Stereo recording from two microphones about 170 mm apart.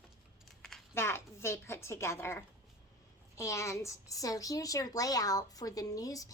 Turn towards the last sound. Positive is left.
turn(degrees=20)  # may be behind; listen again after turning